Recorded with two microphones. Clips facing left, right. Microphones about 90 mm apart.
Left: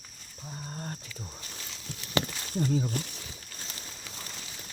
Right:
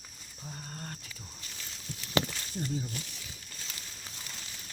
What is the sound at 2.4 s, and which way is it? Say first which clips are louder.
Speech: left 7 dB; 75° left (ahead or behind).